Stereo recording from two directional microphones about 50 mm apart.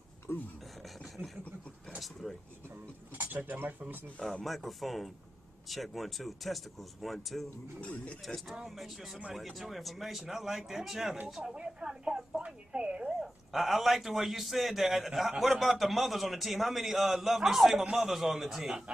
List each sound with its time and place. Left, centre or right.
0.8 s a sound: centre
2.2 s a man's voice: centre
3.5 s speech: right
4.2 s speech: centre
4.5 s a man's voice: centre
7.8 s speech: left
8.6 s a man's voice: centre
11.5 s a sound: centre
12.4 s speech: centre
13.5 s a man's voice: centre